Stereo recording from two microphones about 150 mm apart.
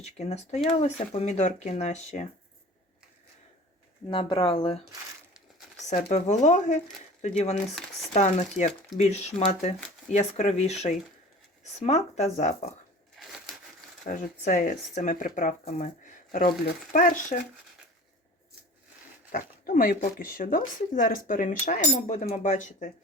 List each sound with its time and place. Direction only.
0.0 s speech: 45° left (ahead or behind)
4.1 s speech: 30° left (ahead or behind)
5.9 s speech: 50° left (ahead or behind)
11.8 s speech: 50° left (ahead or behind)
13.1 s crushing: centre (ahead or behind)
14.0 s speech: 55° left (ahead or behind)
19.3 s speech: 70° left (ahead or behind)